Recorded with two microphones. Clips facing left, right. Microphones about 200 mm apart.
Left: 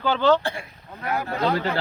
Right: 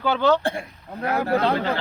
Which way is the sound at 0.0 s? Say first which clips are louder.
Even; 10° right (ahead or behind).